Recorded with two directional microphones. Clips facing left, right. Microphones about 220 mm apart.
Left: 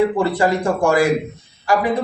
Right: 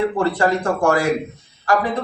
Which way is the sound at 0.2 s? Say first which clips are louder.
Left 1 dB; 10° left (ahead or behind).